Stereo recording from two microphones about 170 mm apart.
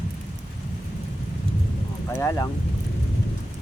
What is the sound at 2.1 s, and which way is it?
Speech, 20° left (ahead or behind).